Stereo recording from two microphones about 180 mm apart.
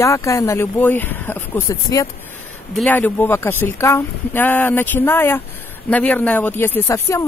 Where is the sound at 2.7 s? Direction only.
5° left (ahead or behind).